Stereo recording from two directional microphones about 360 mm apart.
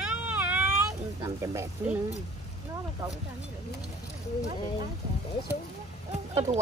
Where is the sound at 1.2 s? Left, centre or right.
Centre.